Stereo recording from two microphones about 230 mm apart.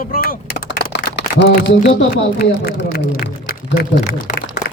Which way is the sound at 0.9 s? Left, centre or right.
Left.